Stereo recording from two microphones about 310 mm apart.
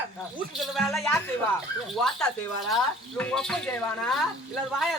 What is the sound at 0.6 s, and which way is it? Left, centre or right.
Speech, centre.